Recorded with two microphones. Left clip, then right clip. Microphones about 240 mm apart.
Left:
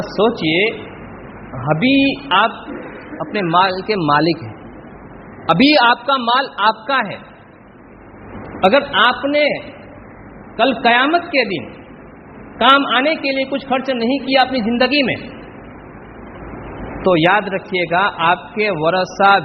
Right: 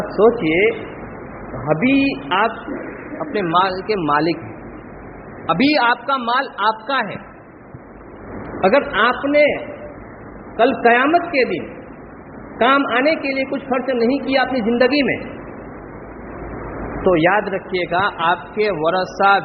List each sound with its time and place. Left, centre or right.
0.2 s a woman's voice: left
3.3 s a man's voice: left
5.5 s a man's voice: left
8.6 s a woman's voice: left
10.6 s a woman's voice: left
12.5 s a woman's voice: left
17.2 s a man's voice: left